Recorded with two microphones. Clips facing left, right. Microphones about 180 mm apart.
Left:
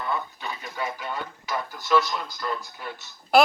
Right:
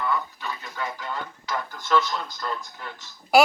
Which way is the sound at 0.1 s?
20° left (ahead or behind).